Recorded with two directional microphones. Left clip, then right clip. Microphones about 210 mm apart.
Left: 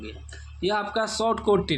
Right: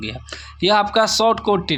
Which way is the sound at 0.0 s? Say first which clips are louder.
Right 11 dB; 35° right (ahead or behind).